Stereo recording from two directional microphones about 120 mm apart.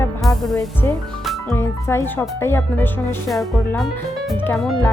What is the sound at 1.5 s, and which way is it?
Speech, 20° left (ahead or behind).